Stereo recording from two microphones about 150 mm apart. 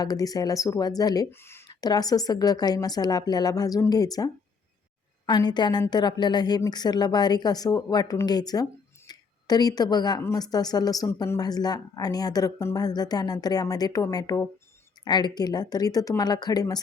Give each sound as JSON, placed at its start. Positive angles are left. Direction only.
{"t": 0.0, "sound": "speech", "side_deg": 25}
{"t": 1.6, "sound": "speech", "side_deg": 25}